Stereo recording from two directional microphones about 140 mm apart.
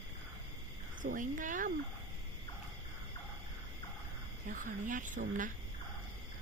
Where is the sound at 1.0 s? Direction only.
65° right (ahead or behind).